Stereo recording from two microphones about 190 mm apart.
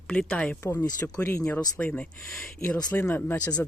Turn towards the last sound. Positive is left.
turn(degrees=20)  # may be behind; listen again after turning